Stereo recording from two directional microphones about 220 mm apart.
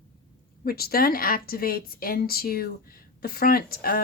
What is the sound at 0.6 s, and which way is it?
Speech, 45° left (ahead or behind).